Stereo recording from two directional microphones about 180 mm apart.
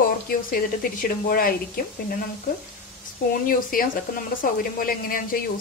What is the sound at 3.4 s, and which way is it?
A woman's voice, 50° left (ahead or behind).